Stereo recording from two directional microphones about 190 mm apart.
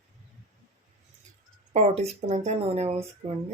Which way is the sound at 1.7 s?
35° right (ahead or behind).